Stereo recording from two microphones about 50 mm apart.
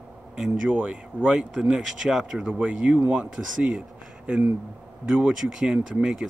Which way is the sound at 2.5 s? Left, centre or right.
Right.